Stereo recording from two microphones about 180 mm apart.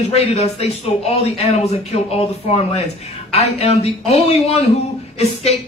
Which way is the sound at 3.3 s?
35° left (ahead or behind).